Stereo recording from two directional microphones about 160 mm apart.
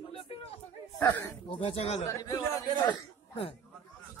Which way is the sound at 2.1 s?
20° left (ahead or behind).